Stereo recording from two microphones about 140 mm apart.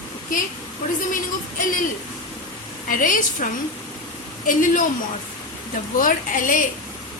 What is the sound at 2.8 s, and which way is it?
Speech, 75° left (ahead or behind).